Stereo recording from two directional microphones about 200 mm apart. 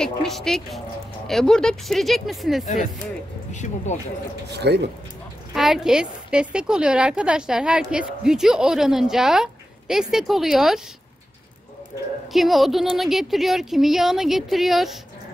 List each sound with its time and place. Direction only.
0.0 s a woman's voice: centre (ahead or behind)
3.6 s speech: 35° left (ahead or behind)
4.5 s speech: 55° right (ahead or behind)
5.5 s a woman's voice: centre (ahead or behind)
12.3 s a woman's voice: centre (ahead or behind)